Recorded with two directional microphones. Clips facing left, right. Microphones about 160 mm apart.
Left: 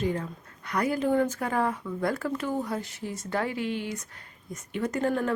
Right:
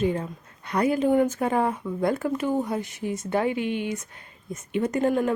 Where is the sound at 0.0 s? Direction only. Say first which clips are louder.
Right 4 dB; 20° right (ahead or behind).